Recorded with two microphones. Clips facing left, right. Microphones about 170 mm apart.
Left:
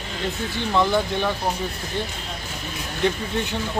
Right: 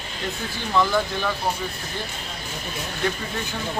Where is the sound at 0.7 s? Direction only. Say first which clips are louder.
Left 1 dB; 20° left (ahead or behind).